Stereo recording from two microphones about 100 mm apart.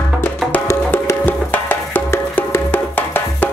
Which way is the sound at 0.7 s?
25° left (ahead or behind).